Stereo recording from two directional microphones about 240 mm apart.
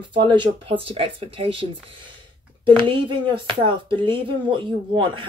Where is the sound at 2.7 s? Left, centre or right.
Right.